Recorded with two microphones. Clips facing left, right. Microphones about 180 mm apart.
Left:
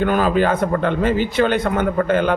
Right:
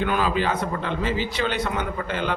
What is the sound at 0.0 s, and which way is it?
A man's voice, 45° left (ahead or behind).